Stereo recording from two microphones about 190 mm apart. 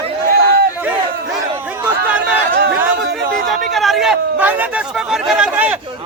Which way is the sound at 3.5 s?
Centre (ahead or behind).